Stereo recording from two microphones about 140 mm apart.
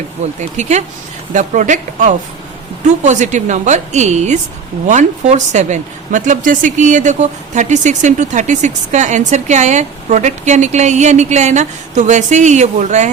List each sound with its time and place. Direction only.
0.3 s a woman's voice: 55° right (ahead or behind)